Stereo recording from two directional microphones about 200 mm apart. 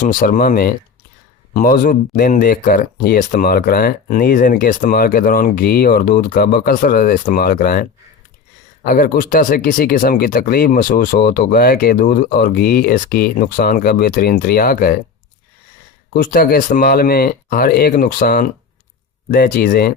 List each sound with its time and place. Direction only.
0.0 s speech: 40° left (ahead or behind)
16.1 s speech: 45° left (ahead or behind)